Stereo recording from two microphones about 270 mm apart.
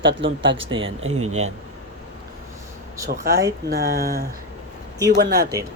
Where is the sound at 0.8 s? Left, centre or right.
Right.